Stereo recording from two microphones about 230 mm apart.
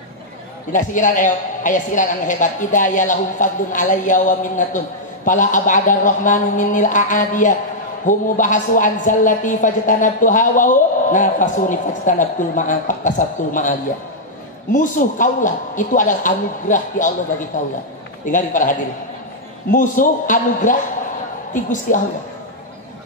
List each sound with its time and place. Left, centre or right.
0.7 s a man's voice: left
18.2 s a man's voice: left